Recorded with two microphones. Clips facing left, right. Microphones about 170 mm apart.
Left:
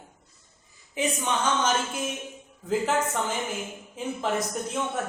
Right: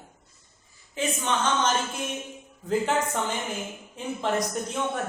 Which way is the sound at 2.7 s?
Centre (ahead or behind).